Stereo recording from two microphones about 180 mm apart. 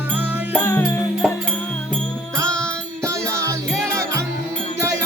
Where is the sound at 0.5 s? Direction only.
15° left (ahead or behind).